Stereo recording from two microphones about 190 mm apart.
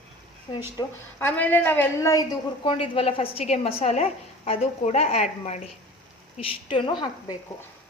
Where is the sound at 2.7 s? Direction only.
30° left (ahead or behind).